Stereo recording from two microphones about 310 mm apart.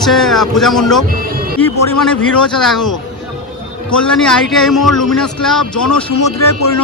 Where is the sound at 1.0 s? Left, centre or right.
Right.